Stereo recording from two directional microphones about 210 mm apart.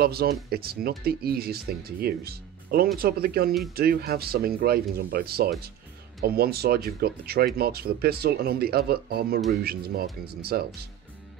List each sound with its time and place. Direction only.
0.0 s speech: 50° right (ahead or behind)